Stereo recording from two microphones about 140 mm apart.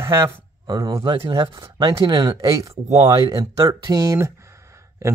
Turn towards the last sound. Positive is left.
turn(degrees=-20)  # may be behind; listen again after turning